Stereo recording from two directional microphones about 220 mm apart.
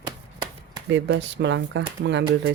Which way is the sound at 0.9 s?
55° right (ahead or behind).